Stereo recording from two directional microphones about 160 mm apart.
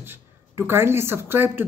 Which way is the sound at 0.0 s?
15° right (ahead or behind).